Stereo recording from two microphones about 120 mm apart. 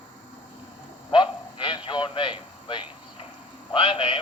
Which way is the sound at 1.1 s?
40° left (ahead or behind).